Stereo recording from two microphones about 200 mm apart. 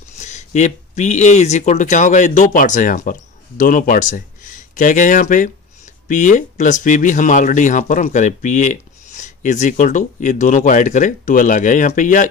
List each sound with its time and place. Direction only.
0.2 s speech: 35° left (ahead or behind)